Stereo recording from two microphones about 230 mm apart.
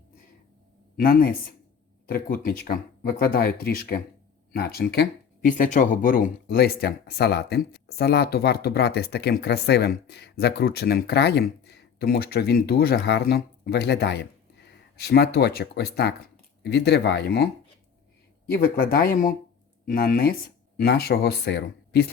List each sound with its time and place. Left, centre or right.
1.0 s speech: left